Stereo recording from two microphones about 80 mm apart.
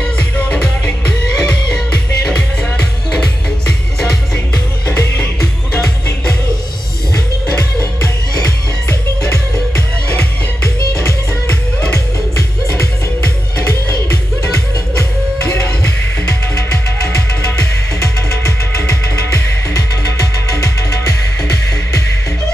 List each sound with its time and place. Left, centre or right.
0.0 s music: centre
10.0 s music: centre
18.9 s music: left